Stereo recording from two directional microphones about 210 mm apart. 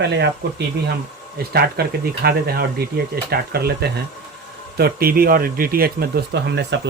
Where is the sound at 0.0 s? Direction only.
55° right (ahead or behind).